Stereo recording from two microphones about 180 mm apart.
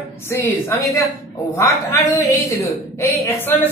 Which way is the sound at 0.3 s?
15° left (ahead or behind).